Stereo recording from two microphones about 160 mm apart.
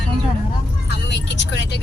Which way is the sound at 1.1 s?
90° left.